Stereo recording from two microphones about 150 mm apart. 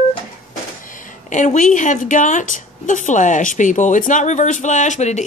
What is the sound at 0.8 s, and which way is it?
Speech, 60° left (ahead or behind).